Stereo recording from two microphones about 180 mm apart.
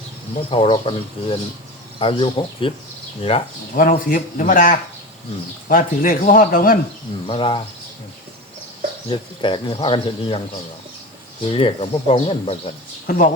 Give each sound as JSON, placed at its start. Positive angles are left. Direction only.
{"t": 0.5, "sound": "speech", "side_deg": 30}
{"t": 3.8, "sound": "speech", "side_deg": 50}
{"t": 7.3, "sound": "speech", "side_deg": 30}
{"t": 9.0, "sound": "speech", "side_deg": 25}
{"t": 11.4, "sound": "speech", "side_deg": 30}
{"t": 13.1, "sound": "speech", "side_deg": 45}